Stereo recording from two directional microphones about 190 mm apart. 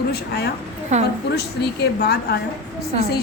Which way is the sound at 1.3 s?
60° left (ahead or behind).